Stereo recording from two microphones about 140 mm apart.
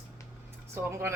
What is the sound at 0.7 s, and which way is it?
Speech, 20° right (ahead or behind).